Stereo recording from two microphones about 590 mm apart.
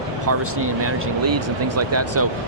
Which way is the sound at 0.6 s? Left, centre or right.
Right.